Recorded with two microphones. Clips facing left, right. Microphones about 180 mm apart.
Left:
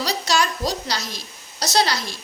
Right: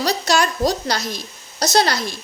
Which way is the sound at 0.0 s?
50° right (ahead or behind).